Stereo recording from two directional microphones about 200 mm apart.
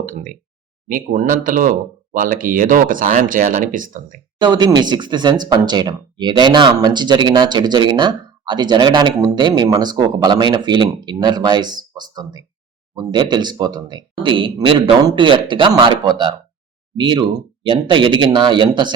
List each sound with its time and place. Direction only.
0.0 s speech: 40° right (ahead or behind)
4.4 s speech: 20° right (ahead or behind)